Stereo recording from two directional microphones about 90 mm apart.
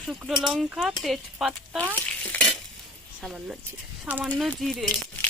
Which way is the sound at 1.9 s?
15° left (ahead or behind).